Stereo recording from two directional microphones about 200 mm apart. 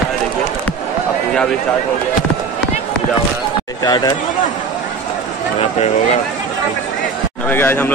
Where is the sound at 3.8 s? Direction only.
20° left (ahead or behind).